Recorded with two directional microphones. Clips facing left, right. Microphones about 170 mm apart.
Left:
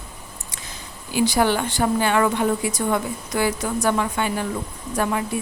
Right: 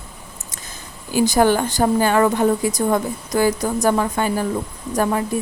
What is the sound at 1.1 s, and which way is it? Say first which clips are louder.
Speech: right 4 dB; 45° right (ahead or behind).